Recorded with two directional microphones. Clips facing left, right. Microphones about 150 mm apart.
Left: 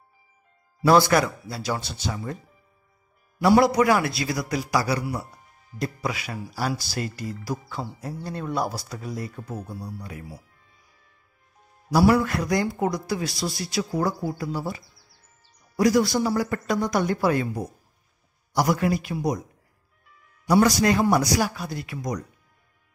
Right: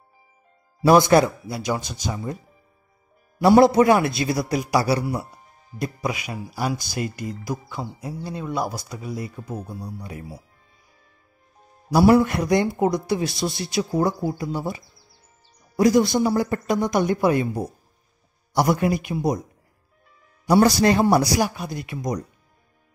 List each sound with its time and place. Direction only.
0.8 s speech: 20° right (ahead or behind)
3.4 s speech: 25° right (ahead or behind)
5.8 s speech: 20° right (ahead or behind)
11.9 s speech: 25° right (ahead or behind)
20.4 s speech: 30° right (ahead or behind)
21.4 s speech: 20° right (ahead or behind)